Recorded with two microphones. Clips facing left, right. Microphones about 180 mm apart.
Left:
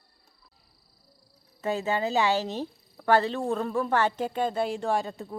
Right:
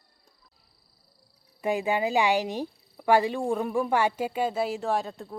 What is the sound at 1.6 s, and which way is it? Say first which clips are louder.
Speech: right 2 dB; 15° right (ahead or behind).